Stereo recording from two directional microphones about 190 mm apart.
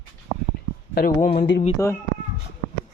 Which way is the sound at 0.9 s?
50° left (ahead or behind).